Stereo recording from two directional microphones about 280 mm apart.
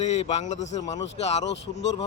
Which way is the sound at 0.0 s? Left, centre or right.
Left.